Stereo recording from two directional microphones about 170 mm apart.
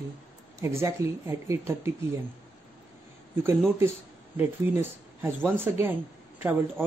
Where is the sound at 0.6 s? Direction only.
15° right (ahead or behind).